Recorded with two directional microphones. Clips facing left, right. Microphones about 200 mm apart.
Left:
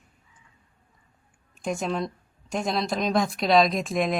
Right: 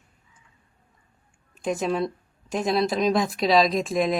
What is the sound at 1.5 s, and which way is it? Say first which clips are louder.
Speech: right 3 dB; centre (ahead or behind).